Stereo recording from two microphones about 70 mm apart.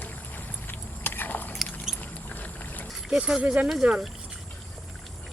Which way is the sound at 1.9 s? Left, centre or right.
Left.